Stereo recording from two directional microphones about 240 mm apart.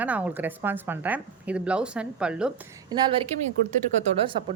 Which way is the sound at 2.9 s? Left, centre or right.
Right.